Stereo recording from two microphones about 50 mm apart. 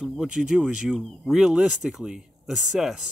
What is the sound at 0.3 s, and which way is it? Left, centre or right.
Speech, right.